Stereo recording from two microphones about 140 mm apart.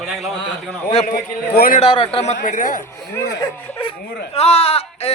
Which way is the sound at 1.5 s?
90° left.